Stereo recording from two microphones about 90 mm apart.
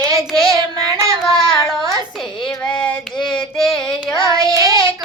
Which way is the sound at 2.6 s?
15° left (ahead or behind).